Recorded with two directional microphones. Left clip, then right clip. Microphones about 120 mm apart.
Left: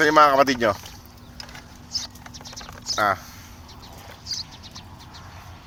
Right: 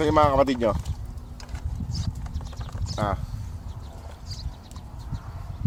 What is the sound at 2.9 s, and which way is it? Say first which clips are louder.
Speech: left 7 dB; 5° right (ahead or behind).